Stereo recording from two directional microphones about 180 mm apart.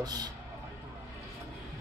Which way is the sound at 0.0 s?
20° right (ahead or behind).